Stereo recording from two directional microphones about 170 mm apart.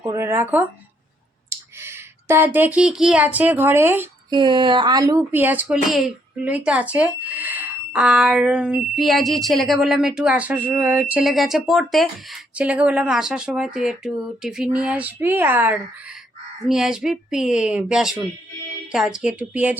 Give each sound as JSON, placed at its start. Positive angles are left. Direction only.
{"t": 0.0, "sound": "speech", "side_deg": -20}
{"t": 4.3, "sound": "speech", "side_deg": -25}
{"t": 5.3, "sound": "speech", "side_deg": -10}